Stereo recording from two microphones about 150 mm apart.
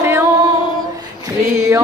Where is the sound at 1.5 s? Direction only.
20° right (ahead or behind).